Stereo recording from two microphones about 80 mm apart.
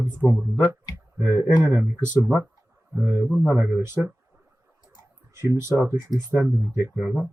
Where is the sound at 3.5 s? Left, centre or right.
Right.